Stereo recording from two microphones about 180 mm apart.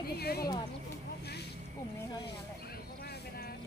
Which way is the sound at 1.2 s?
65° left (ahead or behind).